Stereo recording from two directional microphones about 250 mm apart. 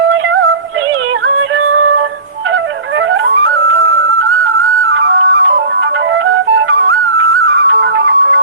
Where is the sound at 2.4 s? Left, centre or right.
Right.